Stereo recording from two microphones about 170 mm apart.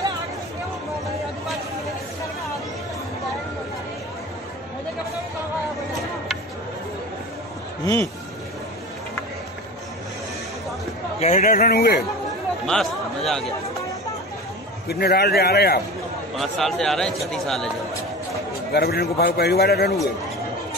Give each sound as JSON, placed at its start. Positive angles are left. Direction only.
{"t": 7.8, "sound": "speech", "side_deg": 15}
{"t": 11.1, "sound": "speech", "side_deg": 40}
{"t": 11.4, "sound": "speech", "side_deg": 60}
{"t": 12.6, "sound": "a man's voice", "side_deg": 5}
{"t": 14.9, "sound": "a man's voice", "side_deg": 65}
{"t": 16.3, "sound": "a man's voice", "side_deg": 0}
{"t": 18.7, "sound": "a man's voice", "side_deg": 65}